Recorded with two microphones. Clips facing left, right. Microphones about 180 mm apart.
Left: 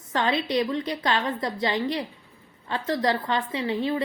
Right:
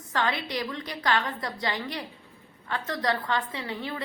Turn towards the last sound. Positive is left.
turn(degrees=20)  # may be behind; listen again after turning